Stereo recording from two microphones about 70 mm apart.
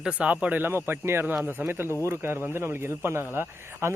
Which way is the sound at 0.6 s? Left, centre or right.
Right.